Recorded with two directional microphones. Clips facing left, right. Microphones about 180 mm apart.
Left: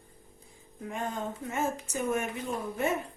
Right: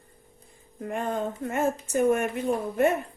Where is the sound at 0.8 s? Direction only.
60° right (ahead or behind).